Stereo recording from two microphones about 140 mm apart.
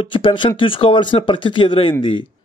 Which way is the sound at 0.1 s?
35° left (ahead or behind).